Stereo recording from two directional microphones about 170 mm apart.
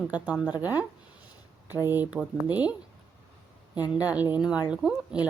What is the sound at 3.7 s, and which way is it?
Speech, 25° left (ahead or behind).